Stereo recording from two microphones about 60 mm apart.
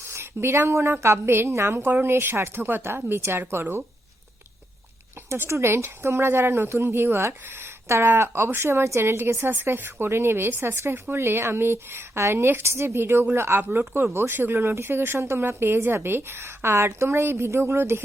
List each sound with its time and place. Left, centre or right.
0.0 s a woman's voice: right
5.5 s a woman's voice: right